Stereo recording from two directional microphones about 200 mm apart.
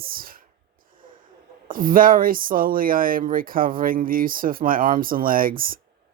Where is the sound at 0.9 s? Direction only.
45° right (ahead or behind).